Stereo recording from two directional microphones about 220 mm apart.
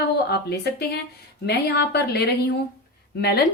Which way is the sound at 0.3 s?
45° left (ahead or behind).